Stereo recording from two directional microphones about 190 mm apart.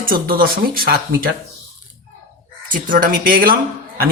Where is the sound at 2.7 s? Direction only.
45° right (ahead or behind).